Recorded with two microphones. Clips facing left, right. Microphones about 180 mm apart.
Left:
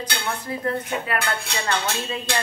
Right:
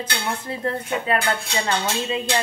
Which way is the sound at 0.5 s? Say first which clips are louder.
Left 1 dB; 25° right (ahead or behind).